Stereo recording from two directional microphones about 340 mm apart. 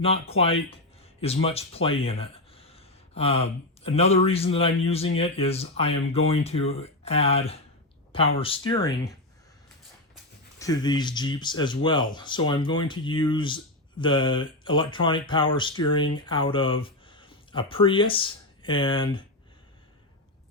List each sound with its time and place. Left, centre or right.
0.0 s speech: centre
10.6 s speech: centre